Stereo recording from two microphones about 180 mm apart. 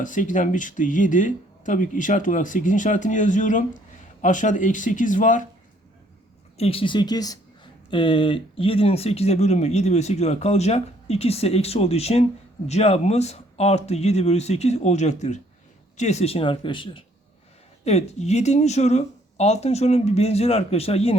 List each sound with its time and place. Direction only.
0.0 s speech: 45° left (ahead or behind)
6.6 s speech: 30° left (ahead or behind)